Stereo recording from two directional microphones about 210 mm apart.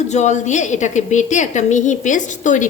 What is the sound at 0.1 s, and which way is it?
A woman's voice, 35° left (ahead or behind).